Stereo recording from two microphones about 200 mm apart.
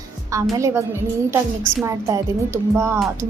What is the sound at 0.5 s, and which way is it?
A woman's voice, 15° right (ahead or behind).